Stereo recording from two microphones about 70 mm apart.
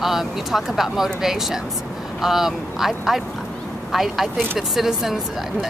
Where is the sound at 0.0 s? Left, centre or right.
Centre.